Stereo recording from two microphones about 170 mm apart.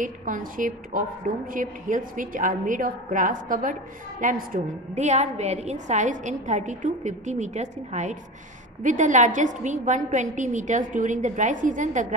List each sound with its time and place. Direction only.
0.0 s a woman's voice: 50° right (ahead or behind)